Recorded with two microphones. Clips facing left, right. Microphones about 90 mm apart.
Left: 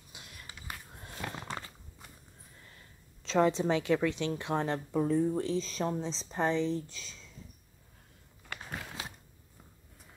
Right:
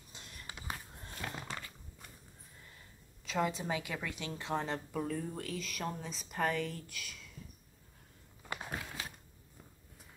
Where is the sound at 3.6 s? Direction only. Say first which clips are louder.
Left 10 dB; 10° right (ahead or behind).